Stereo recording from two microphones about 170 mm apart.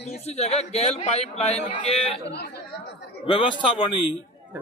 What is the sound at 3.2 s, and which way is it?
Speech, 30° left (ahead or behind).